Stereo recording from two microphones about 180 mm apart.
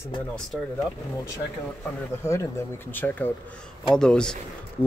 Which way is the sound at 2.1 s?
15° left (ahead or behind).